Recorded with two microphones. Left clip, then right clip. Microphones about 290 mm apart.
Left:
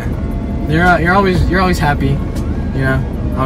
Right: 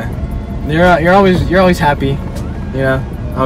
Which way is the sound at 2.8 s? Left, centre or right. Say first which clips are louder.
Right 4 dB; centre.